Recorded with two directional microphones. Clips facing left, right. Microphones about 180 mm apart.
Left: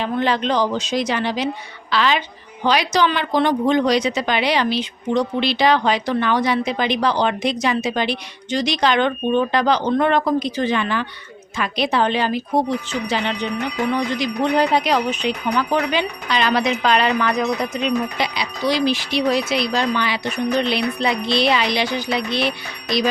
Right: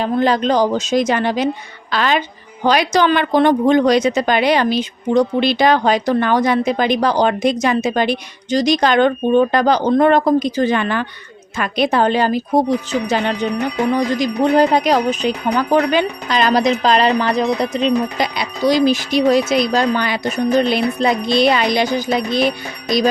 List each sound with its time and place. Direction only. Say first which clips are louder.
0.0 s speech: right 4 dB; 40° right (ahead or behind)
18.3 s speech: right 6 dB; 45° right (ahead or behind)